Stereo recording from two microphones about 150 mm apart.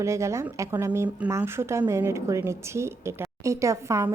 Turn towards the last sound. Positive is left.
turn(degrees=-20)  # may be behind; listen again after turning